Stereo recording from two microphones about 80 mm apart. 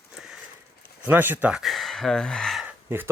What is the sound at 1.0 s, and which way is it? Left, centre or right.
Speech, right.